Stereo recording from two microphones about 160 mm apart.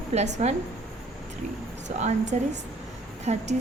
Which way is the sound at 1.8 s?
45° right (ahead or behind).